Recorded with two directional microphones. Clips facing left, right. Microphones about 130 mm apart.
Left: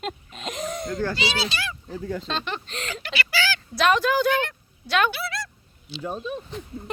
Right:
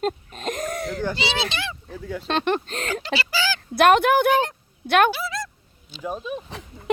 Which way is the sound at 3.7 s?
55° right (ahead or behind).